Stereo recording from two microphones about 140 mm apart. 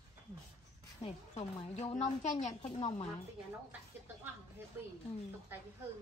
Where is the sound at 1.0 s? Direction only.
45° left (ahead or behind).